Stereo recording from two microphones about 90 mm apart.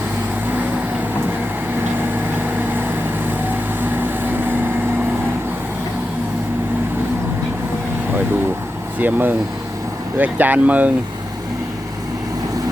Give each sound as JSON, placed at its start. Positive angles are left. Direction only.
{"t": 3.8, "sound": "vehicle", "side_deg": -20}
{"t": 9.0, "sound": "speech", "side_deg": -20}